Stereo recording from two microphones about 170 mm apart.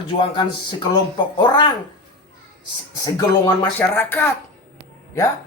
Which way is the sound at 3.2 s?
25° left (ahead or behind).